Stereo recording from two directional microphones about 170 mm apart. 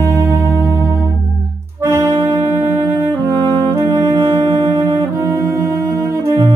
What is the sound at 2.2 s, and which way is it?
Brass instrument, 15° right (ahead or behind).